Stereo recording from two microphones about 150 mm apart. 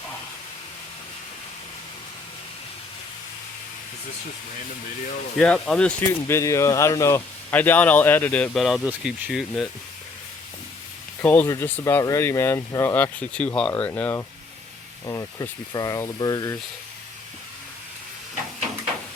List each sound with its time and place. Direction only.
5.4 s speech: 5° left (ahead or behind)
8.6 s speech: 5° right (ahead or behind)
11.2 s speech: 15° left (ahead or behind)